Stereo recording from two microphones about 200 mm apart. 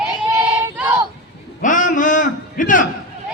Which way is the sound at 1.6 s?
40° left (ahead or behind).